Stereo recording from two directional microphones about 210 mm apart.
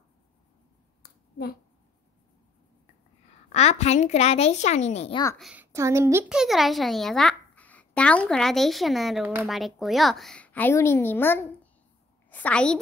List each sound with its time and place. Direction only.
1.0 s a sound: 50° left (ahead or behind)
3.5 s a child's voice: 30° left (ahead or behind)
5.4 s a woman's voice: 5° right (ahead or behind)
6.2 s a child's voice: centre (ahead or behind)